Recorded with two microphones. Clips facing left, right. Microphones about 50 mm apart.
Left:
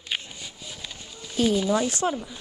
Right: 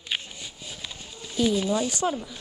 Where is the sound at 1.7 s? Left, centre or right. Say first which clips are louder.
Left 2 dB; left.